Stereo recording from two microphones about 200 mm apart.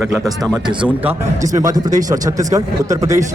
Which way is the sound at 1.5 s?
20° right (ahead or behind).